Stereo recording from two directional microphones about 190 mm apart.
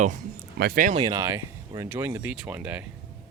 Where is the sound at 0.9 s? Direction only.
20° right (ahead or behind).